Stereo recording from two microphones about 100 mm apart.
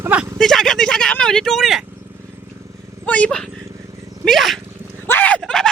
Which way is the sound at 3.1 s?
10° left (ahead or behind).